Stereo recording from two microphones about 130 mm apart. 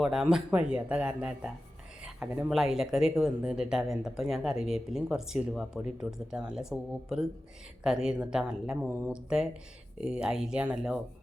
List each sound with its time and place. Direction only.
0.0 s speech: 5° right (ahead or behind)
2.0 s a sound: 5° right (ahead or behind)
2.5 s speech: 5° right (ahead or behind)
8.9 s speech: 15° right (ahead or behind)